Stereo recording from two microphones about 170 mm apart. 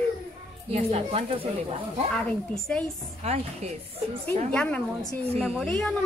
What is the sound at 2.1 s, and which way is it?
Speech, 5° left (ahead or behind).